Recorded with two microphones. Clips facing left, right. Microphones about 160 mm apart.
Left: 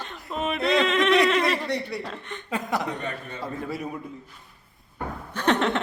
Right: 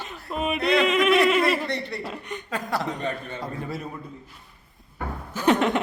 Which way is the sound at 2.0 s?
10° right (ahead or behind).